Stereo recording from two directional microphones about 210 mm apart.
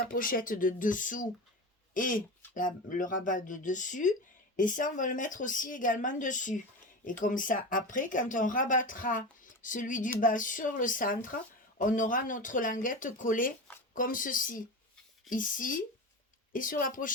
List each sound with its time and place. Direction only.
0.1 s speech: 40° left (ahead or behind)